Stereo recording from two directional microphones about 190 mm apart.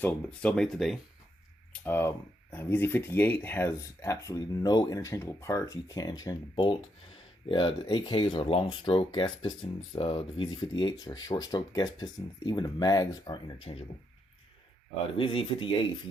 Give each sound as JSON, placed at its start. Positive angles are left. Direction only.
{"t": 0.0, "sound": "speech", "side_deg": 5}
{"t": 15.2, "sound": "speech", "side_deg": 25}